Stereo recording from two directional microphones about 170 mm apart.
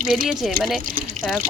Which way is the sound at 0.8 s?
55° right (ahead or behind).